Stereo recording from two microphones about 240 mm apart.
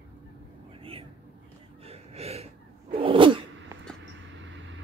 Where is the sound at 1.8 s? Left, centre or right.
Right.